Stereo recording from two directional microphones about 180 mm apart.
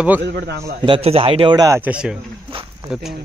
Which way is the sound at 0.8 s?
30° right (ahead or behind).